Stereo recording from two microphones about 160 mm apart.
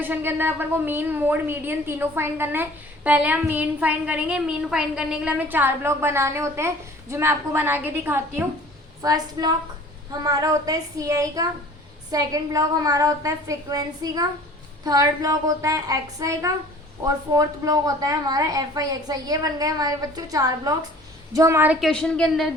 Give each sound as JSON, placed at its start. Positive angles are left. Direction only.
{"t": 0.0, "sound": "a woman's voice", "side_deg": -10}
{"t": 21.8, "sound": "a woman's voice", "side_deg": 5}